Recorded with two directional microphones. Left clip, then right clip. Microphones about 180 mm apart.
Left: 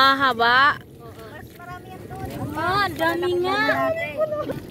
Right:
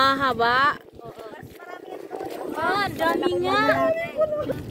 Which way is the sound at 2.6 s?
25° left (ahead or behind).